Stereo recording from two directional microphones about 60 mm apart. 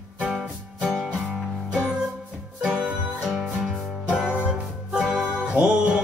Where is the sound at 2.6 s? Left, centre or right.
Centre.